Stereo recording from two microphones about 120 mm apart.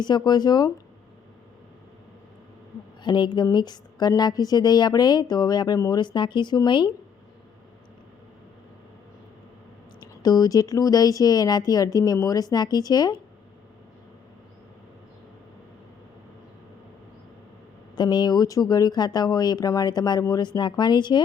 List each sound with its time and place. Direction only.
0.0 s a woman's voice: 35° left (ahead or behind)
3.0 s a woman's voice: 40° left (ahead or behind)
10.0 s a woman's voice: 30° left (ahead or behind)
17.9 s a woman's voice: 35° left (ahead or behind)